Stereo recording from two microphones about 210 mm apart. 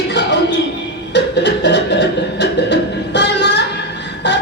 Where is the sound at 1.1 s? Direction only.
55° left (ahead or behind).